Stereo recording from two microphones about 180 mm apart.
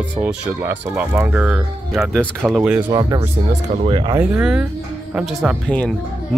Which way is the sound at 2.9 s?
20° right (ahead or behind).